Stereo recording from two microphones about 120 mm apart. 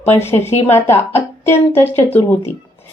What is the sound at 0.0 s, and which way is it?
A woman's voice, 20° left (ahead or behind).